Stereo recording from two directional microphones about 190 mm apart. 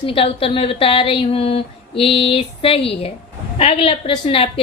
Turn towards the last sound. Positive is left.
turn(degrees=30)  # may be behind; listen again after turning